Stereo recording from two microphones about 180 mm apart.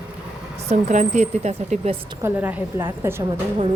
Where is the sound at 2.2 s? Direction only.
10° right (ahead or behind).